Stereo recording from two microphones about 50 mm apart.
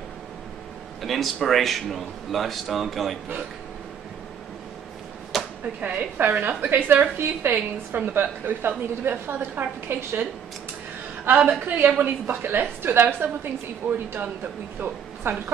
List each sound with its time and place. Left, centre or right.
1.0 s speech: centre
5.6 s a woman's voice: right
6.1 s a woman's voice: right
11.3 s a woman's voice: right